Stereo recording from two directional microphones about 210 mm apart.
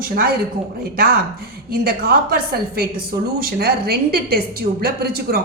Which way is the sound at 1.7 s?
45° right (ahead or behind).